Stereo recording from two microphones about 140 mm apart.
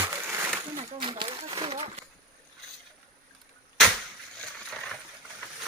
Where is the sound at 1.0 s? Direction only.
35° right (ahead or behind).